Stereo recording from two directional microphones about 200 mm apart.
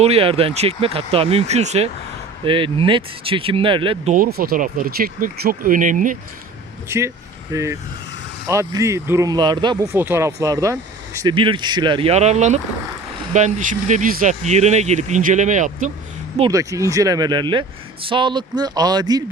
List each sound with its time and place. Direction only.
0.0 s speech: 30° right (ahead or behind)
4.1 s speech: 45° right (ahead or behind)
6.8 s speech: 15° right (ahead or behind); by 15.9 s 40° right (ahead or behind)
16.4 s speech: 15° right (ahead or behind)